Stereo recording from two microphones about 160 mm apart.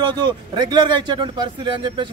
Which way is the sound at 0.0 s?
30° right (ahead or behind).